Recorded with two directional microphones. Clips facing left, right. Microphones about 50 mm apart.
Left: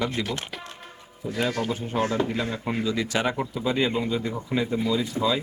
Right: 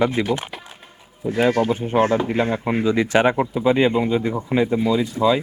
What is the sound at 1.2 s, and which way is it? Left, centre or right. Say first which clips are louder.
A man's voice: right 8 dB; right.